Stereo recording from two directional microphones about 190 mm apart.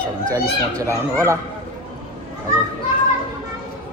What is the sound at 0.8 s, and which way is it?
Speech, 15° right (ahead or behind).